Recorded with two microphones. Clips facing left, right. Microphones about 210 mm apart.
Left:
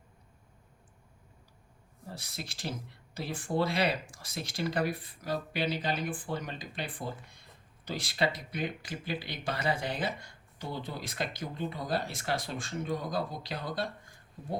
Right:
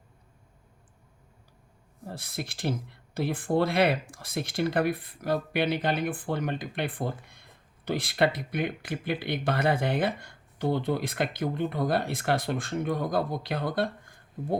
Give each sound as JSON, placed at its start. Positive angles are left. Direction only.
{"t": 2.0, "sound": "speech", "side_deg": -55}